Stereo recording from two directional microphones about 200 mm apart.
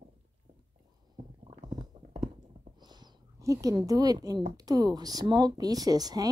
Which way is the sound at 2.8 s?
20° right (ahead or behind).